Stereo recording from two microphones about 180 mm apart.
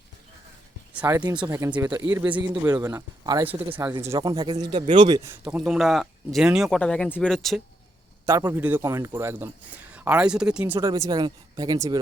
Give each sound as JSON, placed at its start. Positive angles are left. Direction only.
{"t": 0.9, "sound": "speech", "side_deg": -15}
{"t": 1.2, "sound": "speech", "side_deg": -25}
{"t": 5.4, "sound": "speech", "side_deg": -5}
{"t": 8.3, "sound": "speech", "side_deg": -20}
{"t": 10.8, "sound": "speech", "side_deg": -20}